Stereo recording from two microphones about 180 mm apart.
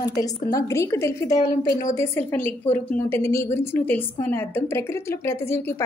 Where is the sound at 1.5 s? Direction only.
55° left (ahead or behind).